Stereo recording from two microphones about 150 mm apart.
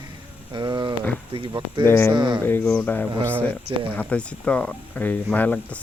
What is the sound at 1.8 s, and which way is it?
Speech, 15° left (ahead or behind).